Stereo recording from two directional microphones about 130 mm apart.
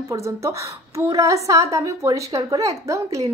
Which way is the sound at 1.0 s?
25° right (ahead or behind).